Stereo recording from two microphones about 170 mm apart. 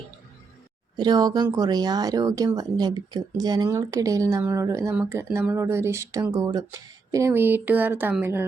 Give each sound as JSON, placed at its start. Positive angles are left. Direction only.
{"t": 0.9, "sound": "a woman's voice", "side_deg": -25}